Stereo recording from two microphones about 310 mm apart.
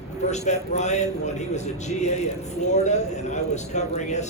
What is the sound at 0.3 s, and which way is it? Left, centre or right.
A man's voice, left.